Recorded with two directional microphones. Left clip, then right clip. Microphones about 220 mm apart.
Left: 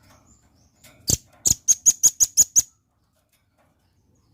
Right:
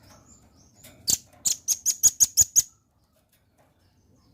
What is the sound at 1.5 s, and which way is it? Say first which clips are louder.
Bird: left 8 dB; 10° left (ahead or behind).